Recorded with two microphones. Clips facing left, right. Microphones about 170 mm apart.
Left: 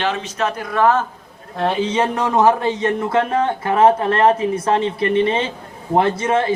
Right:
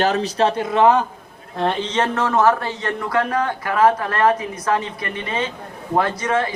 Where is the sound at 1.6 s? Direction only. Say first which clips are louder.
Left 2 dB; 5° left (ahead or behind).